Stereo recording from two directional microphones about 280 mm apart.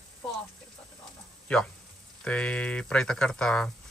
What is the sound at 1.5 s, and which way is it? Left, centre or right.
Speech, centre.